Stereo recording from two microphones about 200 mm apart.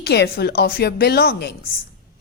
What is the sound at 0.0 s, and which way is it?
A woman's voice, 55° left (ahead or behind).